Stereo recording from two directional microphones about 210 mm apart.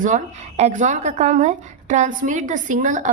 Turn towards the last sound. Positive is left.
turn(degrees=-35)  # may be behind; listen again after turning